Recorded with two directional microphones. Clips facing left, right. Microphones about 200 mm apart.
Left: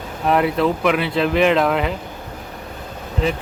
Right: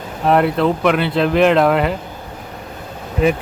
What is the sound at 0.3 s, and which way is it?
Speech, centre (ahead or behind).